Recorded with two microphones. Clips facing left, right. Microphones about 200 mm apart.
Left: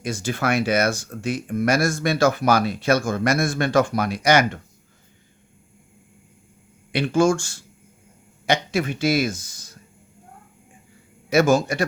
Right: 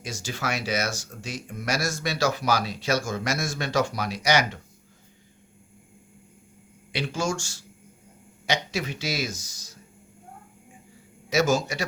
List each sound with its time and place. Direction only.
0.0 s speech: 55° left (ahead or behind)
6.9 s speech: 55° left (ahead or behind)
11.3 s speech: 55° left (ahead or behind)